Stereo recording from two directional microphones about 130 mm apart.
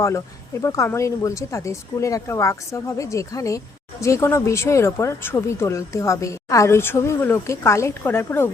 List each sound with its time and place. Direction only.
0.6 s speech: 20° left (ahead or behind)